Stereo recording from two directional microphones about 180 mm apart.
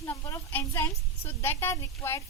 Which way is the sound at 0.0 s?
15° left (ahead or behind).